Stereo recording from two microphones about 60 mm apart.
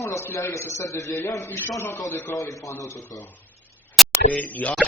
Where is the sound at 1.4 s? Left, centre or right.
Left.